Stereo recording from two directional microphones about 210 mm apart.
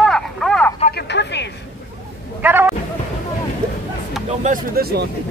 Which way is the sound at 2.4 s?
10° right (ahead or behind).